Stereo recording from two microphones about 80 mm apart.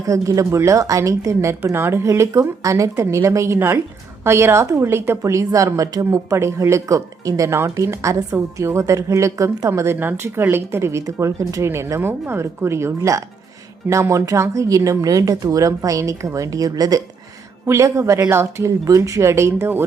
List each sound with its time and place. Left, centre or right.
0.0 s a woman's voice: right
17.7 s a woman's voice: right